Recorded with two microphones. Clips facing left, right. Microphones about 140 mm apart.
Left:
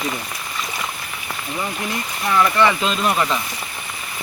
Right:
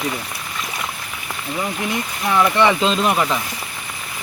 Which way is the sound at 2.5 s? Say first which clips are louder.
Right 2 dB; 20° right (ahead or behind).